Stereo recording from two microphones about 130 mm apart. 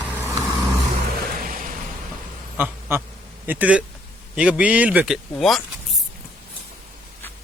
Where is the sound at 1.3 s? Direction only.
90° right.